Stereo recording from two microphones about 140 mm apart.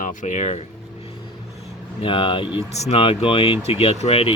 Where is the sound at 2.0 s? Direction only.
40° left (ahead or behind).